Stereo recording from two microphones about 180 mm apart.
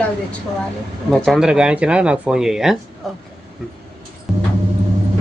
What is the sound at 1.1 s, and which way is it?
Speech, centre (ahead or behind).